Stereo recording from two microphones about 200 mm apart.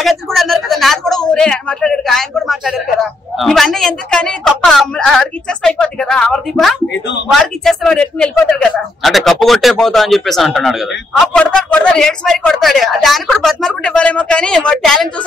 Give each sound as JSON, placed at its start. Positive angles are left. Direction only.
{"t": 0.0, "sound": "speech", "side_deg": 0}
{"t": 6.9, "sound": "speech", "side_deg": 60}
{"t": 7.2, "sound": "speech", "side_deg": 0}